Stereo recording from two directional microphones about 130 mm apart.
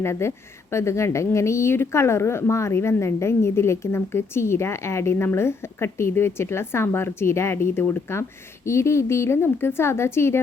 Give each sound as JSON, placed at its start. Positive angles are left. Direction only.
{"t": 0.0, "sound": "speech", "side_deg": 20}